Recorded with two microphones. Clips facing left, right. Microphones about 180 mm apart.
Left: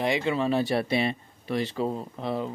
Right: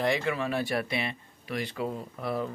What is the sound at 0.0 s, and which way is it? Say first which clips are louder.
Speech: left 3 dB; 20° left (ahead or behind).